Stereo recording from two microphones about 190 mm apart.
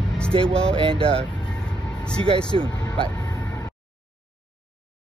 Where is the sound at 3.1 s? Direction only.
20° left (ahead or behind).